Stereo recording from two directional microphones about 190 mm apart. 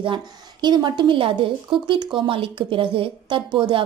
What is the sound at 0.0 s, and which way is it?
A woman's voice, 25° right (ahead or behind).